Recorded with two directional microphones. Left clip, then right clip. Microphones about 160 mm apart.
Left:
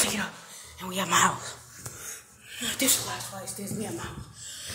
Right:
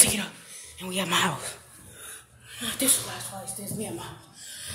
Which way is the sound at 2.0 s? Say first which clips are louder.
Left 3 dB; 15° right (ahead or behind).